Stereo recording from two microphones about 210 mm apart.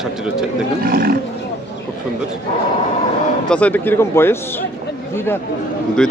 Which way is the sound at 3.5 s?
5° left (ahead or behind).